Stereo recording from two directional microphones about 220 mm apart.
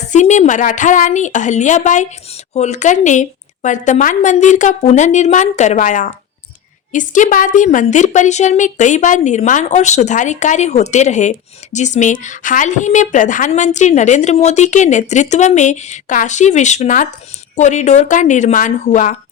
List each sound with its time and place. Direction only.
0.1 s a woman's voice: 35° left (ahead or behind)